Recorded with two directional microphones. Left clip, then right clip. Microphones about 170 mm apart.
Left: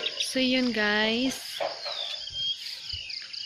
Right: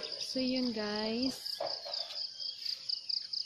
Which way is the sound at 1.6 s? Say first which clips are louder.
Left 7 dB; 45° left (ahead or behind).